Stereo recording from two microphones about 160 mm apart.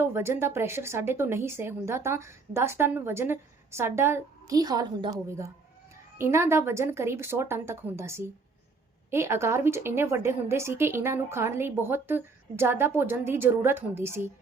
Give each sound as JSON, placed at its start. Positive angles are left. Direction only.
{"t": 0.0, "sound": "a woman's voice", "side_deg": -15}
{"t": 6.1, "sound": "a woman's voice", "side_deg": -15}